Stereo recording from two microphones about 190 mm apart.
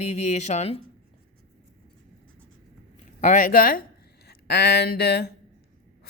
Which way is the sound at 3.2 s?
40° left (ahead or behind).